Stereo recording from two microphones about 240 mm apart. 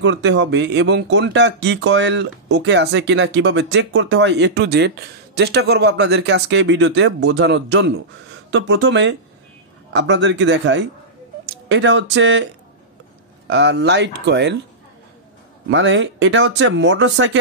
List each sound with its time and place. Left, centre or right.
0.0 s speech: right
13.5 s speech: right
15.7 s speech: right